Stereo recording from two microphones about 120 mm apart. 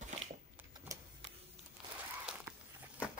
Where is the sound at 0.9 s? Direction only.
30° right (ahead or behind).